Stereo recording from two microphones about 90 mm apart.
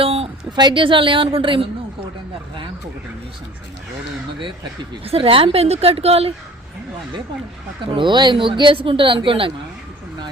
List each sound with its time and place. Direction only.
0.0 s a sound: 90° right
0.5 s speech: 60° right (ahead or behind); by 1.6 s 80° right
5.0 s a woman's voice: 90° right
7.9 s speech: 60° right (ahead or behind); by 9.5 s 75° right (ahead or behind)